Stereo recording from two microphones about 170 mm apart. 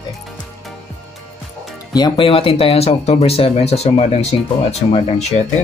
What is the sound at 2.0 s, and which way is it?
Speech, 25° left (ahead or behind).